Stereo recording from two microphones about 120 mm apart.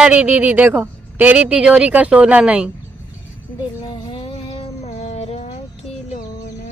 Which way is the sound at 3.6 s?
40° left (ahead or behind).